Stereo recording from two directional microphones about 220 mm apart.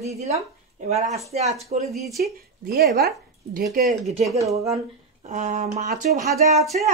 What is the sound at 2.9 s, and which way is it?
Speech, 45° right (ahead or behind).